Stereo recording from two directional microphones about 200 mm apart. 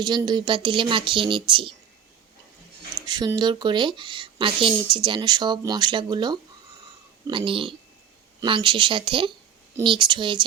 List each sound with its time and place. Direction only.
0.0 s speech: 20° right (ahead or behind)
3.1 s speech: 20° right (ahead or behind)